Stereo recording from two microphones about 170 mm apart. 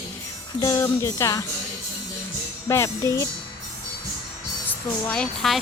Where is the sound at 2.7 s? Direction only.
15° left (ahead or behind).